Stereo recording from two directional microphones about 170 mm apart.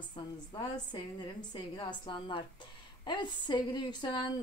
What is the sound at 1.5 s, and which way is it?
Speech, 25° left (ahead or behind).